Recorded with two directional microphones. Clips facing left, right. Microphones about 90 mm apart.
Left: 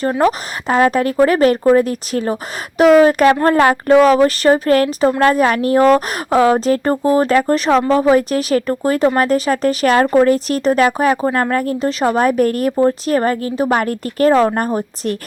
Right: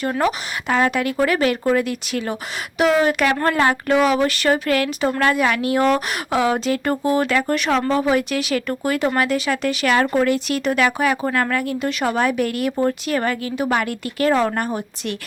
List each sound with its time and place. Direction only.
0.0 s a woman's voice: 35° left (ahead or behind)